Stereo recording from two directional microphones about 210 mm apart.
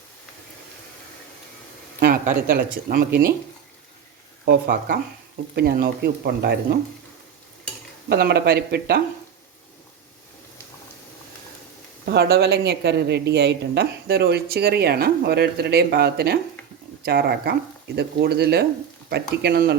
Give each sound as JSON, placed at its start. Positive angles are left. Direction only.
{"t": 2.0, "sound": "speech", "side_deg": -45}
{"t": 4.4, "sound": "speech", "side_deg": -50}
{"t": 8.1, "sound": "speech", "side_deg": -50}
{"t": 12.0, "sound": "speech", "side_deg": -50}